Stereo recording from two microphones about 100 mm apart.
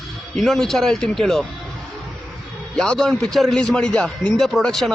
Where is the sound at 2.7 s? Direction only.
10° left (ahead or behind).